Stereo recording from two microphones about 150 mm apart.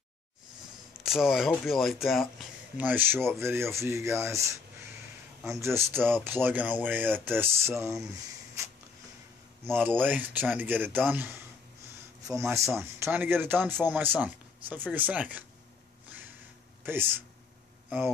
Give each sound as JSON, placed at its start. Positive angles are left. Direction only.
{"t": 0.9, "sound": "speech", "side_deg": -5}
{"t": 2.8, "sound": "speech", "side_deg": -10}
{"t": 9.7, "sound": "speech", "side_deg": -15}
{"t": 16.8, "sound": "speech", "side_deg": -15}